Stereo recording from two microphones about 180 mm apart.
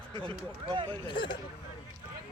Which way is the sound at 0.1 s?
30° right (ahead or behind).